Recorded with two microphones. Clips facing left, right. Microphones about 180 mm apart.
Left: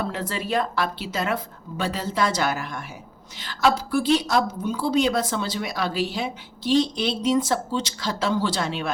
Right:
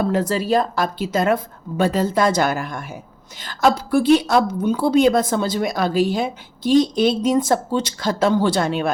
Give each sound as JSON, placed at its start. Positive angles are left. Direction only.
{"t": 0.0, "sound": "a woman's voice", "side_deg": -45}